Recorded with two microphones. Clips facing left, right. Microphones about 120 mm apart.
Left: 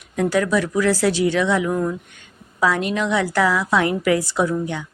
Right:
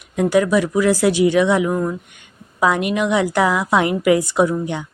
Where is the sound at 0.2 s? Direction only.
15° right (ahead or behind).